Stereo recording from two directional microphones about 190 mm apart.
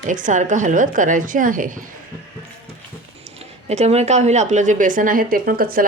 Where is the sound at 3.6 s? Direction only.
35° right (ahead or behind).